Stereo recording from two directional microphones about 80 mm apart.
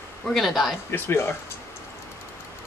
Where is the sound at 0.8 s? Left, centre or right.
Left.